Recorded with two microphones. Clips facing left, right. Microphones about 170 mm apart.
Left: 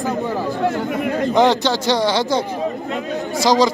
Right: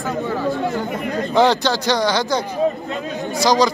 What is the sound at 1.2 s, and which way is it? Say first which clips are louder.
Speech: even; 20° left (ahead or behind).